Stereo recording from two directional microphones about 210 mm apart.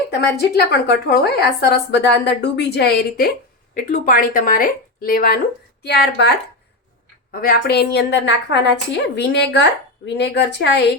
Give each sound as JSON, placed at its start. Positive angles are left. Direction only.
{"t": 0.1, "sound": "a woman's voice", "side_deg": 50}